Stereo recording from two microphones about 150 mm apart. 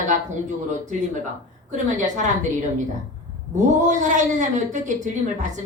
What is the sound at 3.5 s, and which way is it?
A woman's voice, 55° right (ahead or behind).